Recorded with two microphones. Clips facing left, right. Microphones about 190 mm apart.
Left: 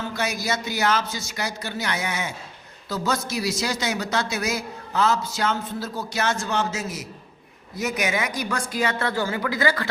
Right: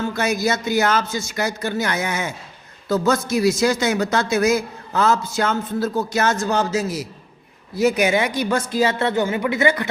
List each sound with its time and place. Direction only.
0.0 s a man's voice: 50° right (ahead or behind); by 9.9 s 20° right (ahead or behind)